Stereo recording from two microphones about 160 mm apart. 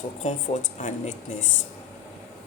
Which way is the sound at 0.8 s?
45° left (ahead or behind).